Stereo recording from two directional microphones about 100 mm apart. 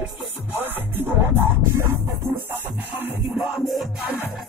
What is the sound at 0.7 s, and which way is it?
Music, 20° right (ahead or behind).